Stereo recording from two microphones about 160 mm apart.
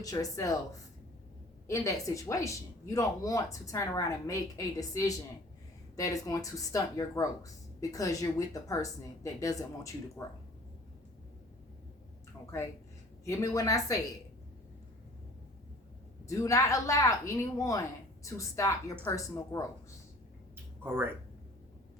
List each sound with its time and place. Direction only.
0.0 s speech: 20° left (ahead or behind)
1.6 s speech: 20° left (ahead or behind)
13.2 s speech: 20° left (ahead or behind)
16.2 s speech: 20° left (ahead or behind)
20.8 s speech: 15° right (ahead or behind)